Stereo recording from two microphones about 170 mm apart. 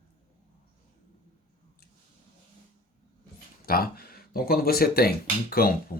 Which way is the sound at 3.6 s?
60° left (ahead or behind).